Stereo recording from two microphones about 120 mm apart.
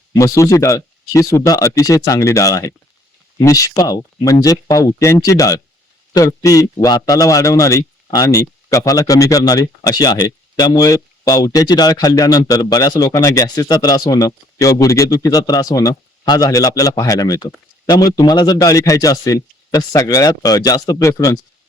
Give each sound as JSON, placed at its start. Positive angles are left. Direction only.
{"t": 0.1, "sound": "speech", "side_deg": 25}